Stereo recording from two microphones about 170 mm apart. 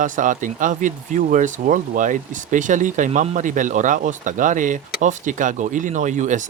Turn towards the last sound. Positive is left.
turn(degrees=-45)  # may be behind; listen again after turning